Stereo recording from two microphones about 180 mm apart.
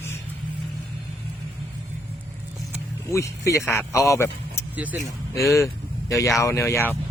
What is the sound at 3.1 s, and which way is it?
Speech, 15° left (ahead or behind).